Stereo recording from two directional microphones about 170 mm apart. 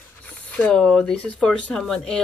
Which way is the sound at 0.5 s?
5° left (ahead or behind).